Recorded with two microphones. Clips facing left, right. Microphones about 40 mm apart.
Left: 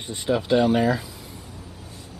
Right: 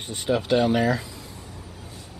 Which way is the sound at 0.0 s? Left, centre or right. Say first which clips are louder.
Left 1 dB; centre.